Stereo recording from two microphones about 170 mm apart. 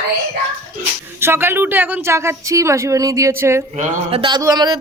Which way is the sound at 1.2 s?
15° right (ahead or behind).